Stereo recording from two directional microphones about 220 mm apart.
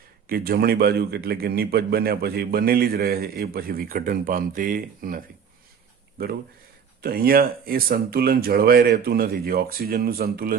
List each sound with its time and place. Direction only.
0.3 s a man's voice: 45° right (ahead or behind)
7.0 s a man's voice: 45° right (ahead or behind)